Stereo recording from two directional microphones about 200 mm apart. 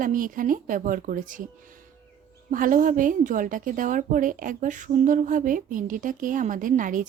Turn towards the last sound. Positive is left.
turn(degrees=-40)  # may be behind; listen again after turning